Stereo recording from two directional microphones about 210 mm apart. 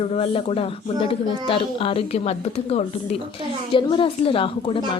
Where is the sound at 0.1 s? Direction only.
25° left (ahead or behind).